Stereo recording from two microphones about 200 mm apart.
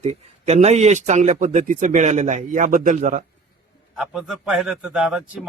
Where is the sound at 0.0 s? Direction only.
35° right (ahead or behind).